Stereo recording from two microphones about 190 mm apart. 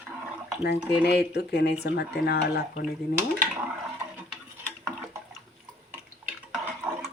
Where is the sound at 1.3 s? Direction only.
55° left (ahead or behind).